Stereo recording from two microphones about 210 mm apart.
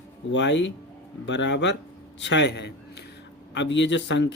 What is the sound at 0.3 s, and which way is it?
A man's voice, 60° left (ahead or behind).